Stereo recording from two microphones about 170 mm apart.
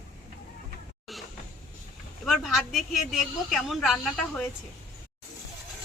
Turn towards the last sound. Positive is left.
turn(degrees=0)  # may be behind; listen again after turning